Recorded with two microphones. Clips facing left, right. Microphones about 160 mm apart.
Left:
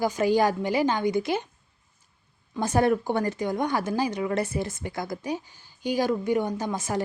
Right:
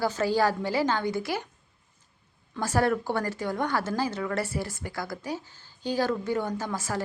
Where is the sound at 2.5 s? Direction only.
20° left (ahead or behind).